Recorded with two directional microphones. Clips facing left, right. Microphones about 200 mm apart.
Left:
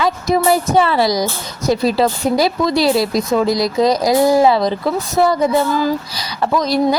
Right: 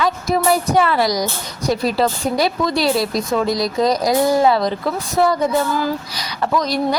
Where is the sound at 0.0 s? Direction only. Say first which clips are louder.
Left 2 dB; 25° left (ahead or behind).